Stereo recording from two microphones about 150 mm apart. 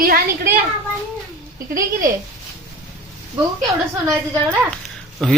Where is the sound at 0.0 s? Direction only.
75° right (ahead or behind).